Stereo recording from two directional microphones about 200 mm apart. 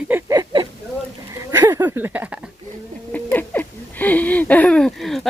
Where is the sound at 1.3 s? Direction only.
15° right (ahead or behind).